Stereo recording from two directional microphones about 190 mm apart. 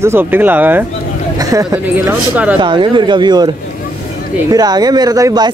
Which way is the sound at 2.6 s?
25° right (ahead or behind).